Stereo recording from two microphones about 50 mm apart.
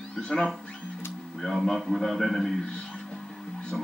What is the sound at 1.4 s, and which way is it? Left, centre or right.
A man's voice, centre.